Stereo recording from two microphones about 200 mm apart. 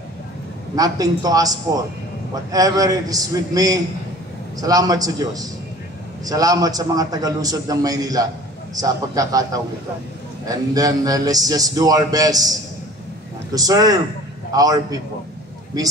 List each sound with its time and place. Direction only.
0.7 s speech: 20° right (ahead or behind)
2.5 s speech: 20° right (ahead or behind)
13.6 s speech: 20° right (ahead or behind)